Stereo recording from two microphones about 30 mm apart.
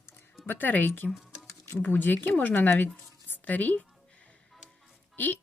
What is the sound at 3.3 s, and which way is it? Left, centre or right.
Speech, left.